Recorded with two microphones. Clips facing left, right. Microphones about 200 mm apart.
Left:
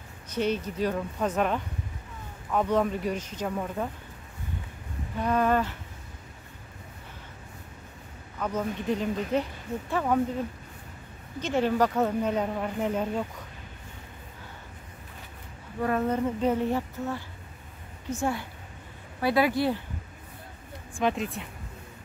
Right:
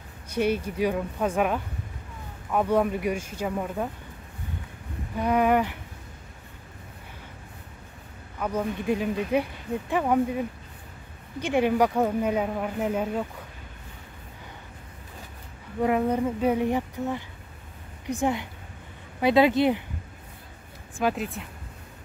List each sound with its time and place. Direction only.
0.3 s speech: 10° right (ahead or behind)
5.2 s speech: 15° right (ahead or behind)
8.4 s speech: 10° right (ahead or behind)
15.8 s speech: 15° right (ahead or behind)
21.0 s speech: 5° right (ahead or behind)